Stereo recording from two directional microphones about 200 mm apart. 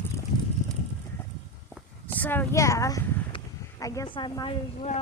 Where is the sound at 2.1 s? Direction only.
10° left (ahead or behind); by 5.0 s 30° left (ahead or behind).